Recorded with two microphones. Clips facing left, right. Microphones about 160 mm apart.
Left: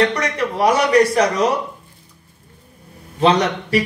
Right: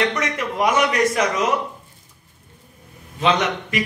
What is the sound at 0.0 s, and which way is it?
Speech, 35° left (ahead or behind).